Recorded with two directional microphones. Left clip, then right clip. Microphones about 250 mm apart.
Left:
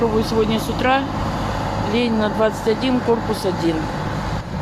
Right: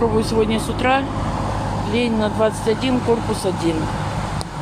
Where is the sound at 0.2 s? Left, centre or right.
Centre.